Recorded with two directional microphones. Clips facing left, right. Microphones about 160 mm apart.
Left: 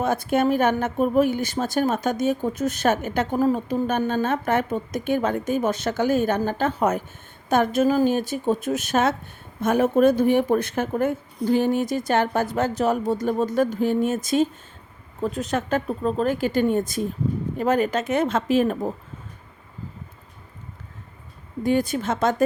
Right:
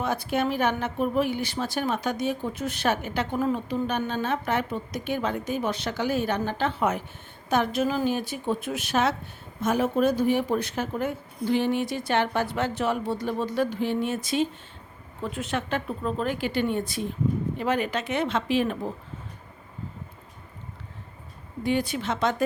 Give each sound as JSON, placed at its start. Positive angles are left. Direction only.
{"t": 0.0, "sound": "speech", "side_deg": 50}
{"t": 21.6, "sound": "speech", "side_deg": 45}